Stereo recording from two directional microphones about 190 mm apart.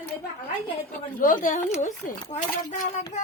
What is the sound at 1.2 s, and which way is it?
Speech, 45° left (ahead or behind).